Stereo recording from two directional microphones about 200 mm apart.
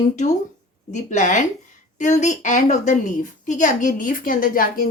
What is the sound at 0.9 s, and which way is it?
A woman's voice, 35° left (ahead or behind).